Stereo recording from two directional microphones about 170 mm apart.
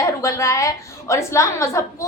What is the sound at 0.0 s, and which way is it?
A woman's voice, 20° left (ahead or behind).